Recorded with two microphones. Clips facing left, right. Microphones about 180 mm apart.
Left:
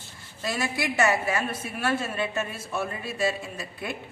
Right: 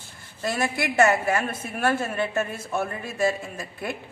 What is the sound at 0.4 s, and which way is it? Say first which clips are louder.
A woman's voice: right 3 dB; 55° right (ahead or behind).